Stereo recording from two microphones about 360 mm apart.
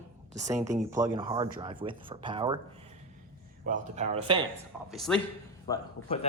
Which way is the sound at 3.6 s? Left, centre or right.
Right.